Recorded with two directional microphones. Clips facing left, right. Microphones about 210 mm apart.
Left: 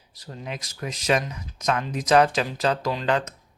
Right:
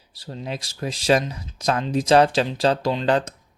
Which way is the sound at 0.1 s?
30° right (ahead or behind).